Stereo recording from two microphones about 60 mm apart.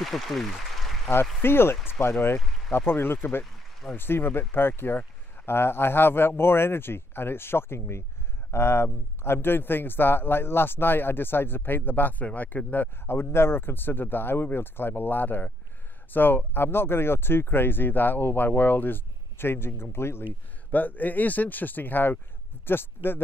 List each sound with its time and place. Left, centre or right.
0.0 s a sound: centre
1.4 s speech: left
20.7 s speech: left